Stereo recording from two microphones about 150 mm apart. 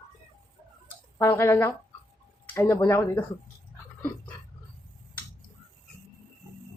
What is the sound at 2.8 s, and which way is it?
Speech, 15° left (ahead or behind).